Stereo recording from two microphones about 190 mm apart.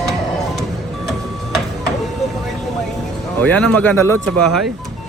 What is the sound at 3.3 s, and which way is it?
Speech, 10° left (ahead or behind).